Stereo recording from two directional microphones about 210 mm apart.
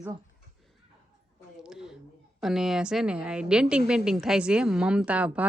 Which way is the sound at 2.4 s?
Centre (ahead or behind).